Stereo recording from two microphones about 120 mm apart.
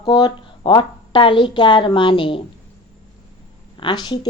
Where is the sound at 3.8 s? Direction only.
40° left (ahead or behind).